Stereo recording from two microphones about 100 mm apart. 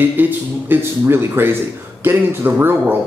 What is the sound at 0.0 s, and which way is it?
Speech, 20° right (ahead or behind).